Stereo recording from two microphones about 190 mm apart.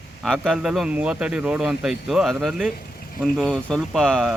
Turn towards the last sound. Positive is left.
turn(degrees=0)  # may be behind; listen again after turning